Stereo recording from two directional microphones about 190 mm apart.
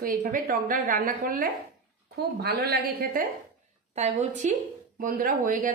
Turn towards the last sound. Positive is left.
turn(degrees=-45)  # may be behind; listen again after turning